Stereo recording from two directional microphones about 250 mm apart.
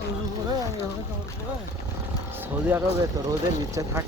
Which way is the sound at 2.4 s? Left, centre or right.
Centre.